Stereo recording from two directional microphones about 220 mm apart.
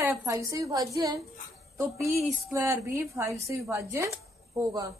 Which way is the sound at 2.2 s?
15° right (ahead or behind).